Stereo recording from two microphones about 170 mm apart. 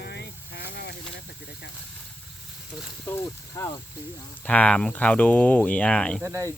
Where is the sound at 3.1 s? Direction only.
15° left (ahead or behind).